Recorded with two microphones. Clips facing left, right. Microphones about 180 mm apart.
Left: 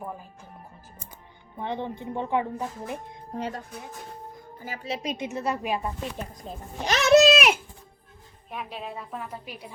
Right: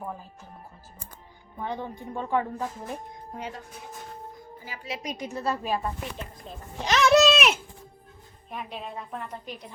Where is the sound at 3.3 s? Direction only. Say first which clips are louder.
Left 5 dB; 40° left (ahead or behind).